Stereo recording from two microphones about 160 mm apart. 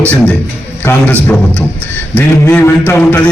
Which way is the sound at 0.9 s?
10° left (ahead or behind).